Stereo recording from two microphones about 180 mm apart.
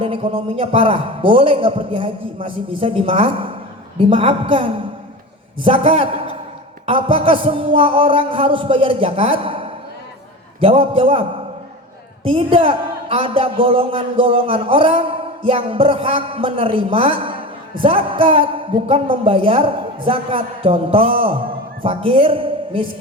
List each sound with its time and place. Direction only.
0.0 s a man's voice: 30° right (ahead or behind)